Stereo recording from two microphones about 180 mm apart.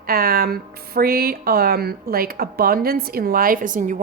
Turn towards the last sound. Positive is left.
turn(degrees=-45)  # may be behind; listen again after turning